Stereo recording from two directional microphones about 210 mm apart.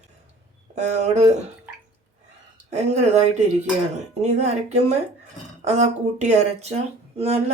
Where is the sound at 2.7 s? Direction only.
30° right (ahead or behind).